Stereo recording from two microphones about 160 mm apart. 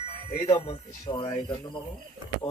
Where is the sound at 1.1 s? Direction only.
30° left (ahead or behind).